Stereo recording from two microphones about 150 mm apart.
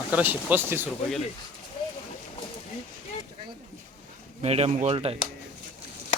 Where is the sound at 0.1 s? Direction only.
10° right (ahead or behind).